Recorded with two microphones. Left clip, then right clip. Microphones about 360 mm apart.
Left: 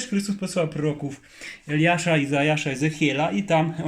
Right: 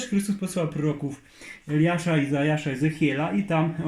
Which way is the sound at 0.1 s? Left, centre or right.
Left.